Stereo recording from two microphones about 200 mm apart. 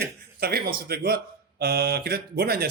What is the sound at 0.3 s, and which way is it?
Speech, 50° right (ahead or behind).